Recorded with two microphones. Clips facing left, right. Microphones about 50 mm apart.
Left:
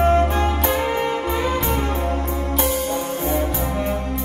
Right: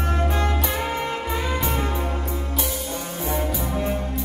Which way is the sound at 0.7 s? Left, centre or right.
Centre.